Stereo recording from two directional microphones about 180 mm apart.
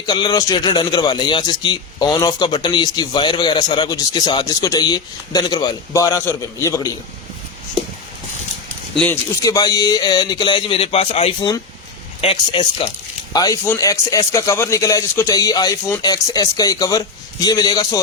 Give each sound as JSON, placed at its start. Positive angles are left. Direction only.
{"t": 0.0, "sound": "a man's voice", "side_deg": 20}
{"t": 9.4, "sound": "a man's voice", "side_deg": 20}